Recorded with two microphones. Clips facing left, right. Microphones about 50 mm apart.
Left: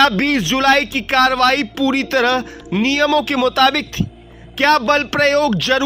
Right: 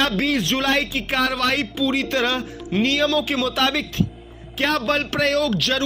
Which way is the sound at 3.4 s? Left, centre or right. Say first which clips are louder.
Left 7 dB; left.